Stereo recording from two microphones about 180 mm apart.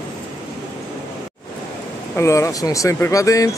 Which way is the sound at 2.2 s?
15° left (ahead or behind).